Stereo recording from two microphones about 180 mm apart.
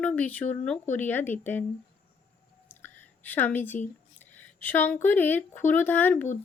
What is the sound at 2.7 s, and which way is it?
Whispering, 10° left (ahead or behind).